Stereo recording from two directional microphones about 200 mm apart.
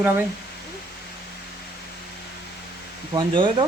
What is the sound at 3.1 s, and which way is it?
Speech, 25° right (ahead or behind).